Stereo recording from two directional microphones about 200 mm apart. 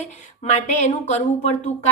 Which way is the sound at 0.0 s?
35° left (ahead or behind).